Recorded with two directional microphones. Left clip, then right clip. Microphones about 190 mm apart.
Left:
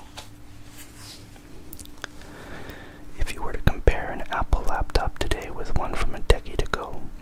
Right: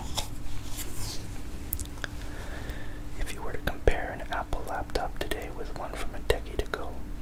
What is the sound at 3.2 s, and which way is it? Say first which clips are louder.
Whispering: left 5 dB; 25° left (ahead or behind).